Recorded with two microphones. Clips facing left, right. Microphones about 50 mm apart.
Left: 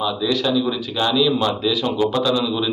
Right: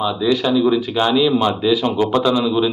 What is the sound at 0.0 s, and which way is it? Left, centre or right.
Speech, centre.